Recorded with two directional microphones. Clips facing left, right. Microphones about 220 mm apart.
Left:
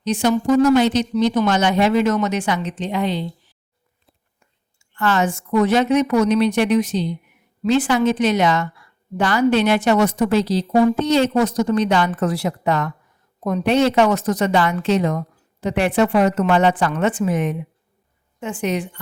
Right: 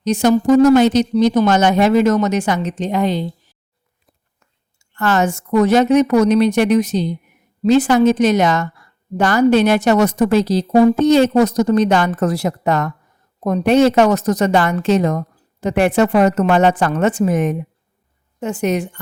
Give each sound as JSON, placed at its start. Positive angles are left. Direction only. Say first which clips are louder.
{"t": 0.0, "sound": "a woman's voice", "louder": "right 4 dB", "side_deg": -45}
{"t": 4.8, "sound": "a woman's voice", "louder": "right 3 dB", "side_deg": -45}